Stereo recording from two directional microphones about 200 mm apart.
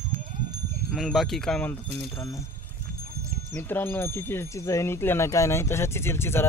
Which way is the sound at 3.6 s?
10° left (ahead or behind).